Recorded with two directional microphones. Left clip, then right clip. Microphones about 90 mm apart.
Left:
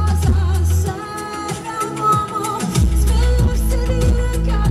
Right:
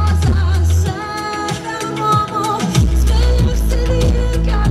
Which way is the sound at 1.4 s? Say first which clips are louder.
Right 2 dB; 15° right (ahead or behind).